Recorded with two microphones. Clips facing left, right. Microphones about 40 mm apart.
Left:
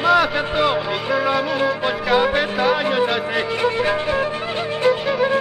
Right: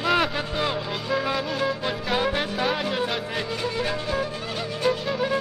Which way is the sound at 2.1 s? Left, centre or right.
Left.